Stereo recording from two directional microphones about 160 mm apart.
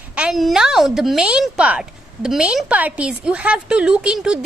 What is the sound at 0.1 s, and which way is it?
A woman's voice, 5° right (ahead or behind).